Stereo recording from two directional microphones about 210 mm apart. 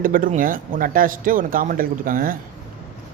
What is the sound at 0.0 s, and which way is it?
Speech, 40° right (ahead or behind).